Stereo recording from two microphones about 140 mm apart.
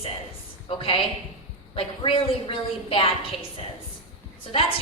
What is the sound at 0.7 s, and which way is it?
A woman's voice, 40° left (ahead or behind).